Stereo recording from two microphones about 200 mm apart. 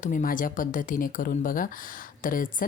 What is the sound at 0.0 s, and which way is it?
Speech, 40° left (ahead or behind).